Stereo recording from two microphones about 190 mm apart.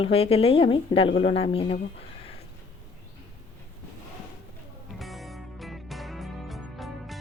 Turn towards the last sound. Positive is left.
turn(degrees=0)  # may be behind; listen again after turning